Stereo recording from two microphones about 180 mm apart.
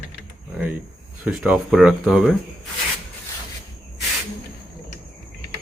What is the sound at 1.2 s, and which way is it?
Speech, 5° right (ahead or behind).